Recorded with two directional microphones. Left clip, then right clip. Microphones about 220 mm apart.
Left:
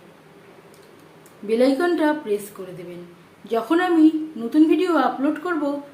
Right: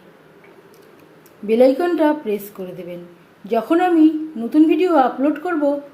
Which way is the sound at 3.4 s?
15° right (ahead or behind).